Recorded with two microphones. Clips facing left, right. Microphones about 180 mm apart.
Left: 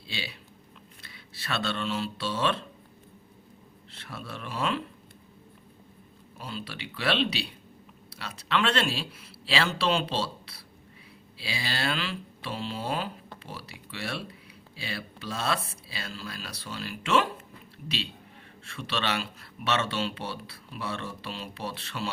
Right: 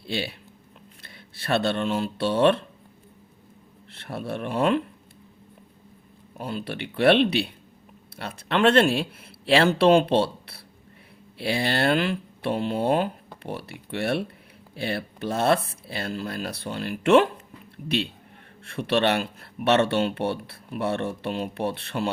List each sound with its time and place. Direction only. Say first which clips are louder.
0.0 s speech: right 9 dB; 55° right (ahead or behind)
3.9 s speech: right 9 dB; 60° right (ahead or behind)
6.3 s speech: right 7 dB; 55° right (ahead or behind)